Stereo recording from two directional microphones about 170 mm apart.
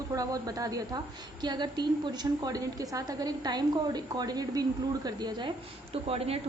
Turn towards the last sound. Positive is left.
turn(degrees=-35)  # may be behind; listen again after turning